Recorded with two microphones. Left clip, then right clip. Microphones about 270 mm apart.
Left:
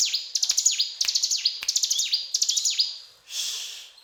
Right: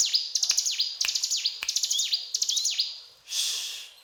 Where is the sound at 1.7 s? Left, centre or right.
Centre.